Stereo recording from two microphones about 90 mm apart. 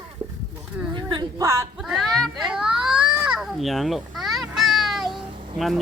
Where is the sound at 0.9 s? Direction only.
50° right (ahead or behind).